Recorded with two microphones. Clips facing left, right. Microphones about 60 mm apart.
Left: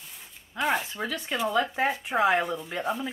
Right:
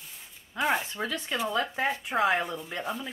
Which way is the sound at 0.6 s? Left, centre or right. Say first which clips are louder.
Left 1 dB; centre.